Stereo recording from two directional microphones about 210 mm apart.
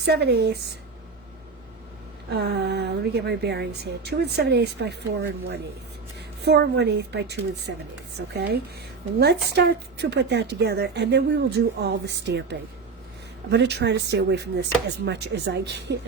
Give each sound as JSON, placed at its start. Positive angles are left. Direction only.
{"t": 0.0, "sound": "a woman's voice", "side_deg": -50}
{"t": 2.3, "sound": "a woman's voice", "side_deg": -50}